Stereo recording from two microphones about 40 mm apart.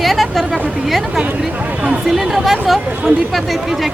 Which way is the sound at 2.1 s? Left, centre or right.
Centre.